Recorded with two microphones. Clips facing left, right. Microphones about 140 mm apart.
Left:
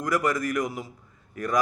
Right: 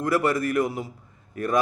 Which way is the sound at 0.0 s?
30° right (ahead or behind).